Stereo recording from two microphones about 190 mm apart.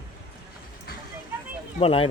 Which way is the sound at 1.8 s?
30° left (ahead or behind).